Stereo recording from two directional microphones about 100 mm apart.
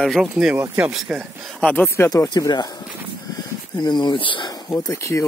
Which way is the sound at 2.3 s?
45° left (ahead or behind).